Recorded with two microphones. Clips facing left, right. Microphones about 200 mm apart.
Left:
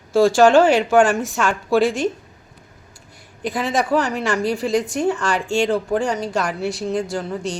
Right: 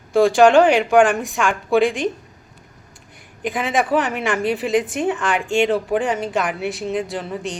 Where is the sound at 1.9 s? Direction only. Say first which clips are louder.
Left 1 dB; 15° right (ahead or behind).